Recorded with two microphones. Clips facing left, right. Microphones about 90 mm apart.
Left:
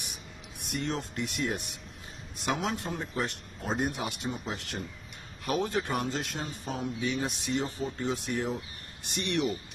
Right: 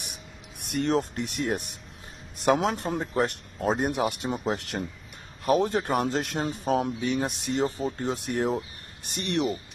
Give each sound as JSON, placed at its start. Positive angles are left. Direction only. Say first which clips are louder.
{"t": 0.6, "sound": "a sound", "louder": "right 8 dB", "side_deg": -60}
{"t": 1.1, "sound": "speech", "louder": "right 3 dB", "side_deg": -40}
{"t": 5.4, "sound": "speech", "louder": "right 6 dB", "side_deg": -40}
{"t": 8.5, "sound": "speech", "louder": "right 7 dB", "side_deg": -40}